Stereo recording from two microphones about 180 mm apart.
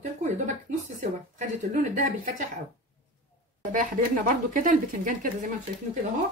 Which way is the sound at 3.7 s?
45° right (ahead or behind).